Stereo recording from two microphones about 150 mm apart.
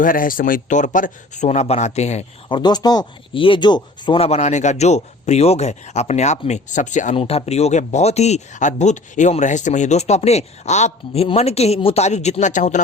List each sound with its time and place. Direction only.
0.0 s speech: 65° left (ahead or behind); by 2.2 s 50° left (ahead or behind)
2.5 s speech: 30° left (ahead or behind); by 7.2 s 55° left (ahead or behind)
7.2 s speech: 40° left (ahead or behind)